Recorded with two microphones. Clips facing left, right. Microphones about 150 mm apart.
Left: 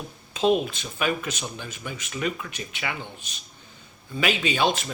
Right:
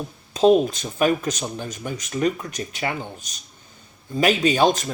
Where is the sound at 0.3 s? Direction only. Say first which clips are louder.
Right 6 dB; 40° right (ahead or behind).